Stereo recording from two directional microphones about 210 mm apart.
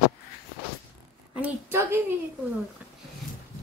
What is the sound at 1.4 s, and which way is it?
Speech, 10° right (ahead or behind).